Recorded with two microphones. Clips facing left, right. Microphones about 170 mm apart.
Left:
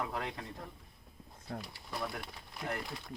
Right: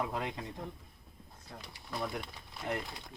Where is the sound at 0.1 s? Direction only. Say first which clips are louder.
Right 2 dB; 15° right (ahead or behind).